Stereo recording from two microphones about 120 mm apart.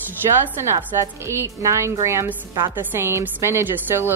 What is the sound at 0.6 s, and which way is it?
A woman's voice, 25° right (ahead or behind).